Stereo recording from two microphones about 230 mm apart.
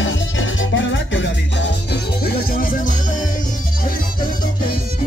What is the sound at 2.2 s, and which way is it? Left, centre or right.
Music, left.